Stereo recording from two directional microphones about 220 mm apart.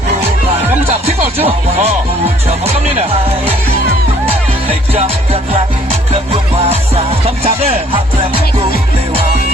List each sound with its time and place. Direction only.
0.9 s music: 25° right (ahead or behind)
2.9 s music: 25° right (ahead or behind)
5.9 s music: 30° right (ahead or behind)